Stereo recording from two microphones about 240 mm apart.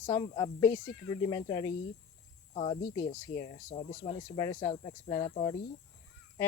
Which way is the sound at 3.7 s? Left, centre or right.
Left.